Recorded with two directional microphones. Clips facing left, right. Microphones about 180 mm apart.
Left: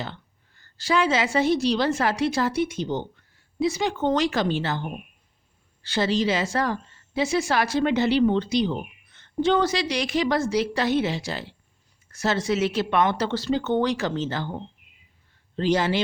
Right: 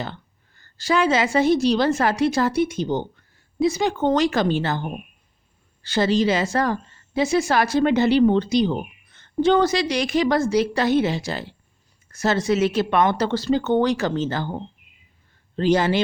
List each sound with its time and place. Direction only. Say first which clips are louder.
0.0 s a woman's voice: right 3 dB; 45° right (ahead or behind)